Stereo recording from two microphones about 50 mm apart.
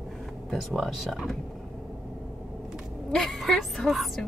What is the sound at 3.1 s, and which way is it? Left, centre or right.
Speech, centre.